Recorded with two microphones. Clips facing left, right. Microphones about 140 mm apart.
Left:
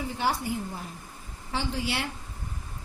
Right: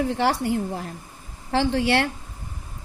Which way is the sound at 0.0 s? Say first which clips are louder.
Right 7 dB; 85° right.